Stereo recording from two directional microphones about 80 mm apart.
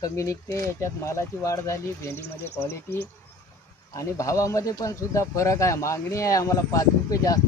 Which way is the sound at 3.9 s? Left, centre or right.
Left.